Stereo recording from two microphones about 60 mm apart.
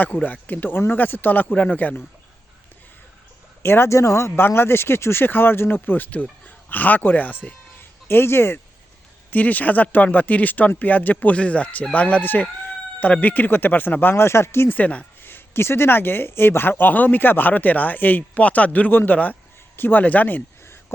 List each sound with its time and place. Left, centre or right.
0.0 s speech: left
3.6 s speech: left
9.3 s speech: left
14.8 s speech: left
15.2 s speech: left